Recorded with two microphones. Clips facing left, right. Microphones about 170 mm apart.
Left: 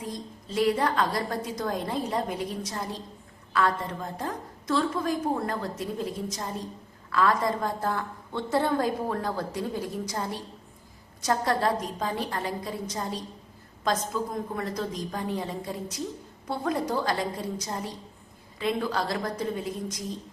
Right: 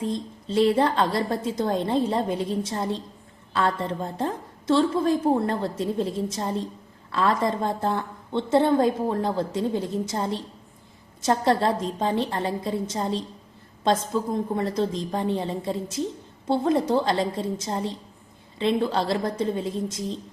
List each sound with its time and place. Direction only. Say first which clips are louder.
0.0 s a woman's voice: right 8 dB; 25° right (ahead or behind)